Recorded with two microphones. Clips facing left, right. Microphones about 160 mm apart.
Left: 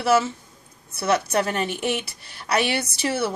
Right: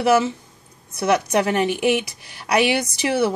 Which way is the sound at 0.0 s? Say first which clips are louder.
Right 3 dB; 15° right (ahead or behind).